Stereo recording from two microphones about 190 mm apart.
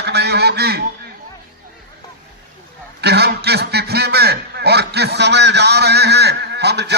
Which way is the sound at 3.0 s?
60° right (ahead or behind).